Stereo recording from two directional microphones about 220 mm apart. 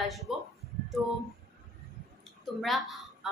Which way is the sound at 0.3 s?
Centre (ahead or behind).